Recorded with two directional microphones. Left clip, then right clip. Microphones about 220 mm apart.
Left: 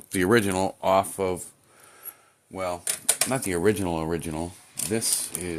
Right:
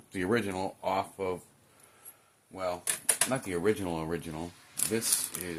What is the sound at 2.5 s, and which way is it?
Speech, 50° left (ahead or behind).